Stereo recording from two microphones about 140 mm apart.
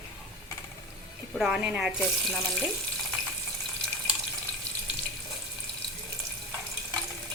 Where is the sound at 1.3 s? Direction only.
5° right (ahead or behind).